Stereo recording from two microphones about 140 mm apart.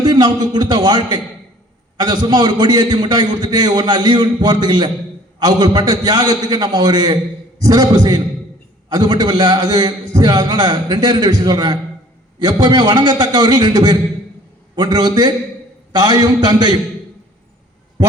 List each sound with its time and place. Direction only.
0.0 s a man's voice: 30° right (ahead or behind)